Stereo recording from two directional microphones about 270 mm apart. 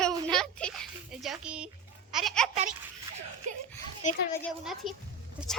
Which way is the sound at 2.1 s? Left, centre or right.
Centre.